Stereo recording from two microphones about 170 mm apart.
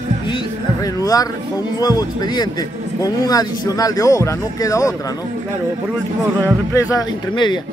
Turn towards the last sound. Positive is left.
turn(degrees=25)  # may be behind; listen again after turning